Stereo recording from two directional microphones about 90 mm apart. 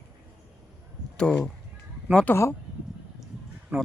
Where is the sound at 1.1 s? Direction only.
10° left (ahead or behind).